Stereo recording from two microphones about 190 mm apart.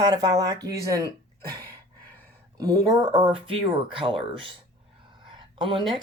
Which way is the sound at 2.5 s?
20° right (ahead or behind).